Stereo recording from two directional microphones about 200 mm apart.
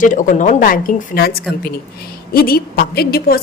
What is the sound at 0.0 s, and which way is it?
A woman's voice, 40° left (ahead or behind).